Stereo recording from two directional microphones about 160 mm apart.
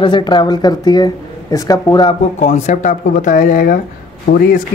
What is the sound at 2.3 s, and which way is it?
Speech, 50° left (ahead or behind).